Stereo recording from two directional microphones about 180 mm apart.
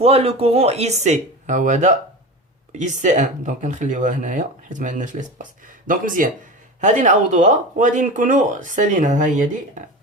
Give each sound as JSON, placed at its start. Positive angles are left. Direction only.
{"t": 0.0, "sound": "speech", "side_deg": -35}